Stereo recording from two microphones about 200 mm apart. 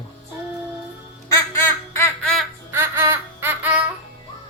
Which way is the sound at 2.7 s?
10° right (ahead or behind).